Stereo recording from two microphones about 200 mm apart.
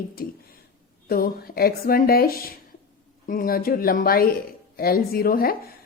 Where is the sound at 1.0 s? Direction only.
50° left (ahead or behind).